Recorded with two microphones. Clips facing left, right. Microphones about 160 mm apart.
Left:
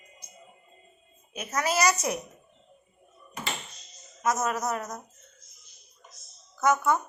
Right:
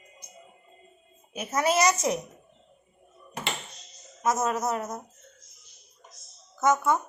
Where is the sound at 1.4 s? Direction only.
25° right (ahead or behind).